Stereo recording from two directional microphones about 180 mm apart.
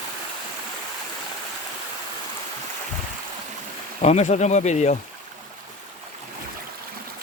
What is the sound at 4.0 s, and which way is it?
Speech, 40° left (ahead or behind).